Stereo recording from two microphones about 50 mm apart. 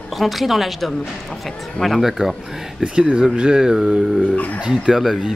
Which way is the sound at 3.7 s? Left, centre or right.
Centre.